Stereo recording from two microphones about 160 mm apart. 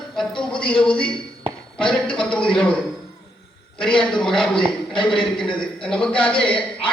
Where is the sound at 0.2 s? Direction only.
5° left (ahead or behind).